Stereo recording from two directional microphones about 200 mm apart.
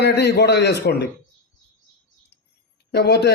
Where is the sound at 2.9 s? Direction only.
55° left (ahead or behind).